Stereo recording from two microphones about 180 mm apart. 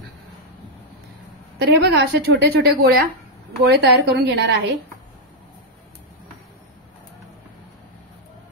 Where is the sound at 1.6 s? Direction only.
65° right (ahead or behind).